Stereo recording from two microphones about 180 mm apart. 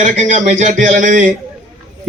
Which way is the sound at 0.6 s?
45° right (ahead or behind).